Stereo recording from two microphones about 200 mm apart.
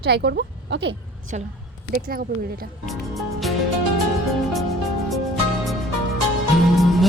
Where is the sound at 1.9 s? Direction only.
45° right (ahead or behind).